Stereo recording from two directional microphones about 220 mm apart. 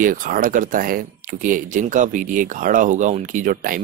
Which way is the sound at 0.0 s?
40° right (ahead or behind).